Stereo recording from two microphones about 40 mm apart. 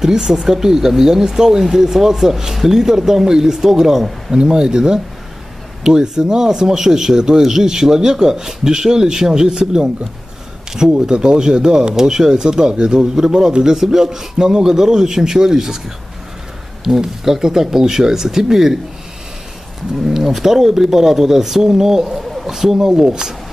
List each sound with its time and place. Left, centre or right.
0.0 s speech: centre
11.0 s speech: centre
16.8 s speech: centre
20.0 s speech: centre